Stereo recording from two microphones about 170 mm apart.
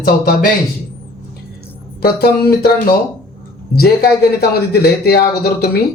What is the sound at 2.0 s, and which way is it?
Speech, 65° left (ahead or behind).